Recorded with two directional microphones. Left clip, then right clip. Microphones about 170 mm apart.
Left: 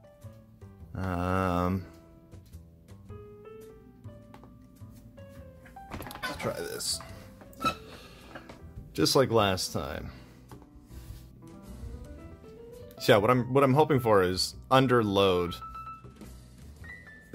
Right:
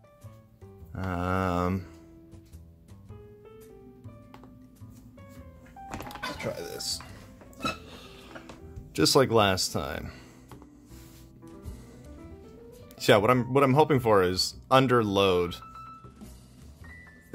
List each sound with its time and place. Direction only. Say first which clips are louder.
0.9 s speech: even; centre (ahead or behind)
6.0 s music: left 1 dB; 25° left (ahead or behind)
7.5 s a sound: left 2 dB; centre (ahead or behind)
8.9 s speech: right 2 dB; 15° right (ahead or behind)
12.8 s speech: right 1 dB; 10° right (ahead or behind)